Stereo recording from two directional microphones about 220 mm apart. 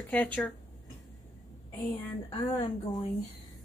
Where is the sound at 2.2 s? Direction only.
20° left (ahead or behind).